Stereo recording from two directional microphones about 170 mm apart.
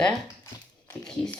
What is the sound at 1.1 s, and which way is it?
Speech, 5° left (ahead or behind).